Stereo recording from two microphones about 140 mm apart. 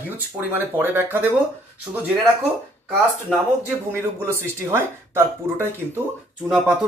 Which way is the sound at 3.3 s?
Centre (ahead or behind).